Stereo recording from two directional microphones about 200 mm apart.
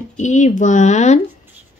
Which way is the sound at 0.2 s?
40° left (ahead or behind).